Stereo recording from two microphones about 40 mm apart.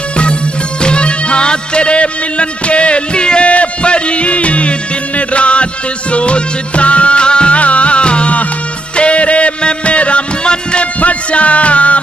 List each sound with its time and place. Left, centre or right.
0.8 s music: left